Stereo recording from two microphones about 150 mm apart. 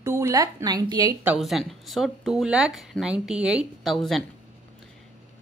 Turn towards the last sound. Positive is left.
turn(degrees=0)  # may be behind; listen again after turning